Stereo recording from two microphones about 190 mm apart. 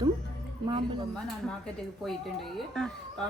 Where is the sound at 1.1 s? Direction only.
5° left (ahead or behind).